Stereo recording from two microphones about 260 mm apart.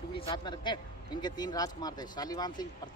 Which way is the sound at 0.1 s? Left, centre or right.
Centre.